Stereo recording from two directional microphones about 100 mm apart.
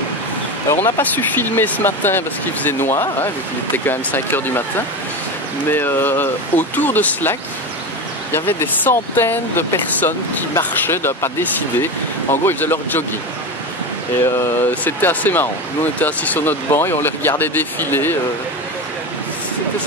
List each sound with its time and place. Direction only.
0.8 s speech: 20° left (ahead or behind)
5.7 s speech: 20° left (ahead or behind)
14.2 s speech: 25° left (ahead or behind)